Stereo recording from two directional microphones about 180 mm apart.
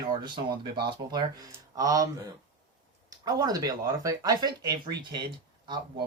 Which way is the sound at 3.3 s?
20° right (ahead or behind).